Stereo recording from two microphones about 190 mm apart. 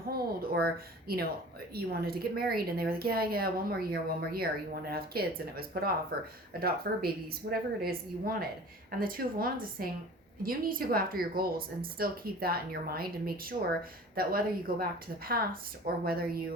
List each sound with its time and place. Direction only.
0.1 s speech: 55° right (ahead or behind)
16.0 s speech: 50° right (ahead or behind)